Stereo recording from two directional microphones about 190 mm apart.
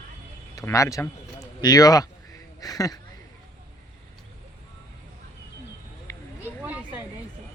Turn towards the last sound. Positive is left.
turn(degrees=-10)  # may be behind; listen again after turning